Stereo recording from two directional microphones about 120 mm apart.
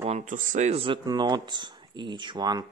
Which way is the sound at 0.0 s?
65° right (ahead or behind).